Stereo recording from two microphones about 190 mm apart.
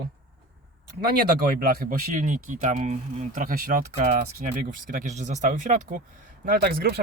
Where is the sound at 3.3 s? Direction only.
45° right (ahead or behind).